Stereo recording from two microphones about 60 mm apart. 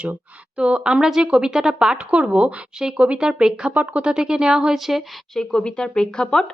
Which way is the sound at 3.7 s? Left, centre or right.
Right.